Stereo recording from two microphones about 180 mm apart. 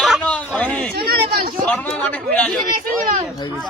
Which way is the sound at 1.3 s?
55° right (ahead or behind).